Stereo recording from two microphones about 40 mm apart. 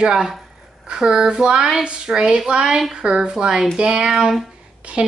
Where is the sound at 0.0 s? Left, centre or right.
Centre.